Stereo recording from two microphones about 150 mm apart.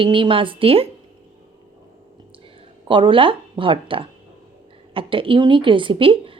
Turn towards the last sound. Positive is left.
turn(degrees=-35)  # may be behind; listen again after turning